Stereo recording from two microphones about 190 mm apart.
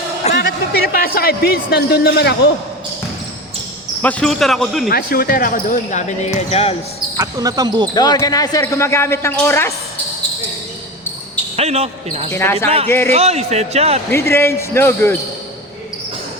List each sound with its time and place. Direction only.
0.3 s speech: 55° left (ahead or behind)
4.0 s speech: 5° left (ahead or behind)
4.9 s speech: 50° left (ahead or behind); by 6.7 s 35° left (ahead or behind)
7.2 s speech: 20° right (ahead or behind)
7.9 s speech: 20° left (ahead or behind)
11.5 s a man's voice: 35° right (ahead or behind)
12.3 s speech: 15° left (ahead or behind)
12.6 s a man's voice: 30° right (ahead or behind)
14.1 s speech: 15° left (ahead or behind)